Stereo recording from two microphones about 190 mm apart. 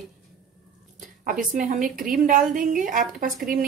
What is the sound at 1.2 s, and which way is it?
A woman's voice, 45° right (ahead or behind).